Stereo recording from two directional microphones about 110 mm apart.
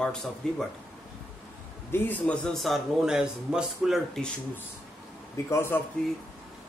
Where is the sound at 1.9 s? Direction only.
15° left (ahead or behind); by 4.0 s 5° right (ahead or behind).